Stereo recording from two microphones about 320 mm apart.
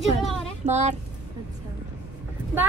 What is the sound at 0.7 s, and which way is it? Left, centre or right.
Speech, right.